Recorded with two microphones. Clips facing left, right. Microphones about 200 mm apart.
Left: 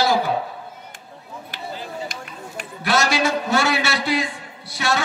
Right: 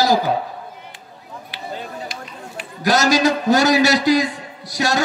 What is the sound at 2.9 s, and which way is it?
A man's voice, 40° right (ahead or behind).